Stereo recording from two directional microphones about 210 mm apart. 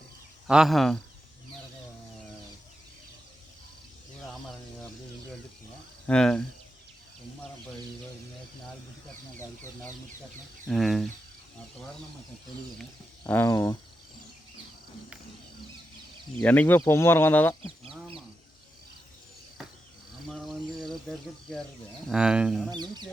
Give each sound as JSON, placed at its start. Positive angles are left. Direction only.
{"t": 0.4, "sound": "speech", "side_deg": -5}
{"t": 6.1, "sound": "speech", "side_deg": 5}
{"t": 10.7, "sound": "speech", "side_deg": 0}
{"t": 12.8, "sound": "speech", "side_deg": 10}
{"t": 16.4, "sound": "speech", "side_deg": 10}
{"t": 20.2, "sound": "a sound", "side_deg": 0}
{"t": 22.1, "sound": "speech", "side_deg": -5}
{"t": 22.7, "sound": "speech", "side_deg": -20}